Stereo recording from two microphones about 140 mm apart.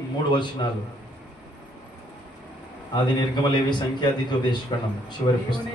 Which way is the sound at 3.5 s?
30° left (ahead or behind).